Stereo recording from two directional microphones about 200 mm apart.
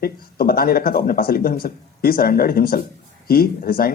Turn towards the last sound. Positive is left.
turn(degrees=50)  # may be behind; listen again after turning